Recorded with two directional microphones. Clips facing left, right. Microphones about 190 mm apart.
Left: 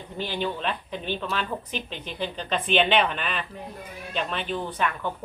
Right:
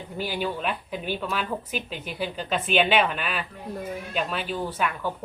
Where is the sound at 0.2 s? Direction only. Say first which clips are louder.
Even; 10° right (ahead or behind).